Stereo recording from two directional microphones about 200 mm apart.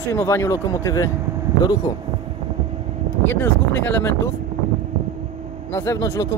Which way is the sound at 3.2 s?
10° left (ahead or behind).